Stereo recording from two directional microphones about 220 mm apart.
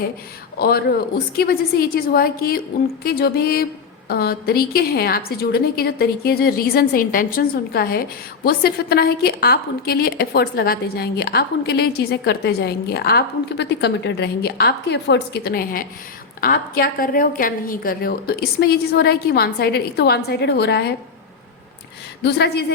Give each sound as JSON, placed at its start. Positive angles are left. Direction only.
{"t": 0.6, "sound": "a woman's voice", "side_deg": 45}
{"t": 22.2, "sound": "a woman's voice", "side_deg": 50}